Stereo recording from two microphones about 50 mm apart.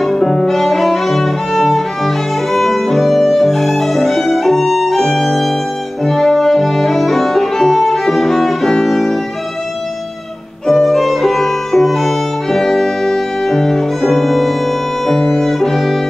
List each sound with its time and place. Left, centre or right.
0.0 s music: centre
6.0 s violin: centre
10.7 s violin: centre
15.0 s music: centre